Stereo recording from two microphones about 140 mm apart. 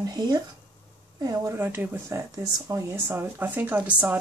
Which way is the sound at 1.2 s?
25° right (ahead or behind).